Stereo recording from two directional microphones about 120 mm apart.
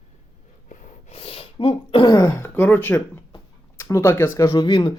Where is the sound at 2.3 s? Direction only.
20° left (ahead or behind); by 4.9 s 35° left (ahead or behind).